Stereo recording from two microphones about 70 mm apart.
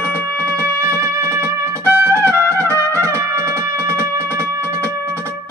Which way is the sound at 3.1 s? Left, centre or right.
Right.